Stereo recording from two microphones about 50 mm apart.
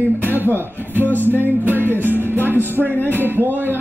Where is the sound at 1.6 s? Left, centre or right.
Right.